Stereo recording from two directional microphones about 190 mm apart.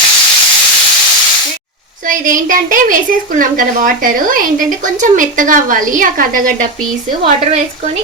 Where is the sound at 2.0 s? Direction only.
45° right (ahead or behind).